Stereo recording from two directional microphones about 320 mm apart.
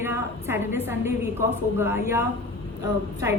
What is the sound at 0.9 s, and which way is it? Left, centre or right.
A woman's voice, centre.